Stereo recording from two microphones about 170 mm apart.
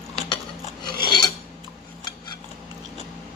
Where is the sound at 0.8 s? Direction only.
25° left (ahead or behind).